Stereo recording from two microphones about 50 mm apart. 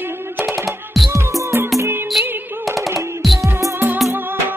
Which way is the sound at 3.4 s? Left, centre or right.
Right.